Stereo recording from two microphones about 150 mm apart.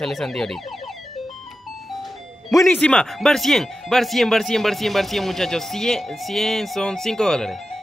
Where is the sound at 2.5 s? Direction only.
20° left (ahead or behind).